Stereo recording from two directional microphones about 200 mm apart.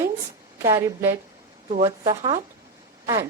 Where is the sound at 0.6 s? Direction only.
15° right (ahead or behind).